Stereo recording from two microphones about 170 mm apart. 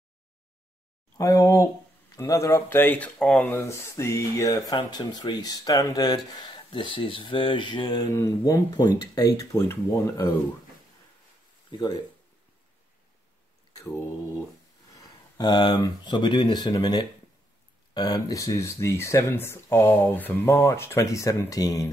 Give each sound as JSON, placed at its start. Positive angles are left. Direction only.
{"t": 1.1, "sound": "speech", "side_deg": 20}
{"t": 11.7, "sound": "speech", "side_deg": 25}
{"t": 13.8, "sound": "speech", "side_deg": 15}
{"t": 15.3, "sound": "speech", "side_deg": 25}